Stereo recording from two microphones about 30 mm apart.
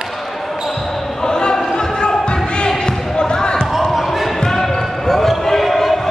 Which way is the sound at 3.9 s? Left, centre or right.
Centre.